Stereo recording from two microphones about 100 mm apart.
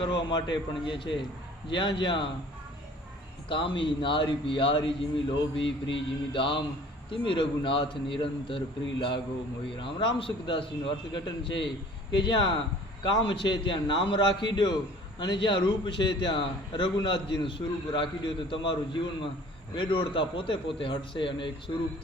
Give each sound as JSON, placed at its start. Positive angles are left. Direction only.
{"t": 0.0, "sound": "a man's voice", "side_deg": 50}
{"t": 3.5, "sound": "a man's voice", "side_deg": 60}